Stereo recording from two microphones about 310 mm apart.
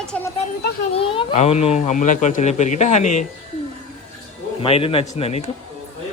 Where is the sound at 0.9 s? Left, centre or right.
Centre.